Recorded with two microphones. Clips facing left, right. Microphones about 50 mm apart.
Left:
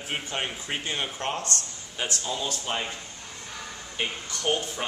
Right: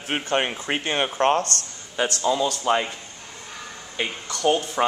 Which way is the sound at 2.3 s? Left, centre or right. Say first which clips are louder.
Right 12 dB; right.